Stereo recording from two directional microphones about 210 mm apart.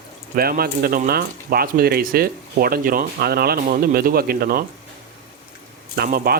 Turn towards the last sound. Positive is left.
turn(degrees=-45)  # may be behind; listen again after turning